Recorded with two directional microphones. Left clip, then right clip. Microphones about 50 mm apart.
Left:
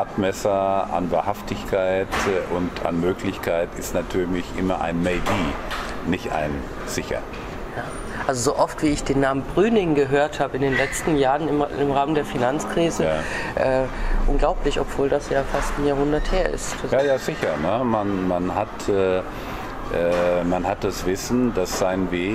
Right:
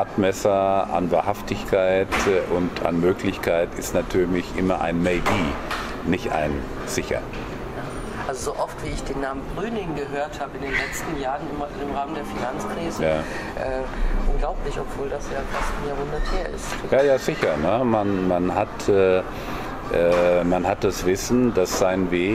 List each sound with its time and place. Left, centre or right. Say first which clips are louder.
0.2 s speech: right 2 dB; centre
8.3 s speech: left 7 dB; left
11.9 s speech: left 6 dB; left
16.9 s speech: right 2 dB; centre